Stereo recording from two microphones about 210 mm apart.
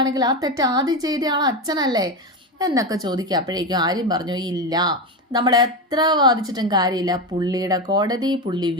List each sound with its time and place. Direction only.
0.0 s a woman's voice: 20° right (ahead or behind)